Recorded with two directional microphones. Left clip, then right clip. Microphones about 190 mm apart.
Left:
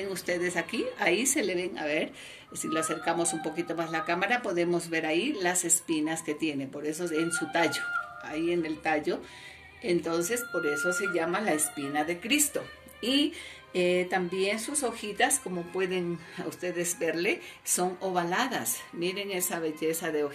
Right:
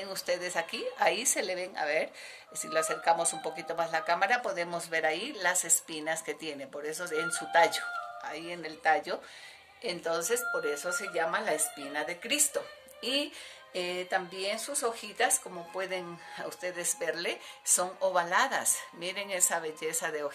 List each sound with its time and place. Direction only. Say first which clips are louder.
0.3 s speech: left 1 dB; 35° right (ahead or behind); by 20.2 s 50° right (ahead or behind)